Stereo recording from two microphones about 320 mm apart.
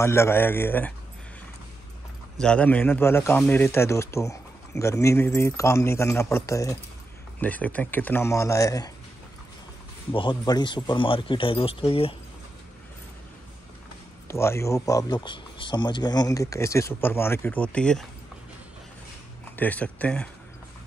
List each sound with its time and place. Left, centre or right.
0.0 s a man's voice: centre
2.4 s a man's voice: centre
10.1 s a man's voice: centre
14.2 s a man's voice: centre
19.5 s speech: centre